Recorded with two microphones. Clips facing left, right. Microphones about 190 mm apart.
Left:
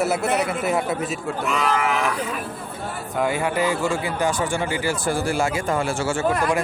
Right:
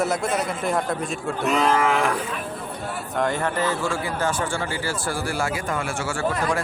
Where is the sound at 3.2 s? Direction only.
10° left (ahead or behind).